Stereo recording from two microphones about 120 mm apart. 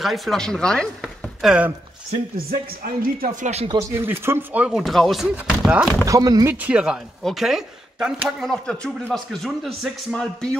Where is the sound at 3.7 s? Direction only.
20° right (ahead or behind).